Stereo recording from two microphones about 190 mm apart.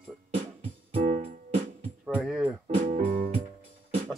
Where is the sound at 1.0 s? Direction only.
40° right (ahead or behind).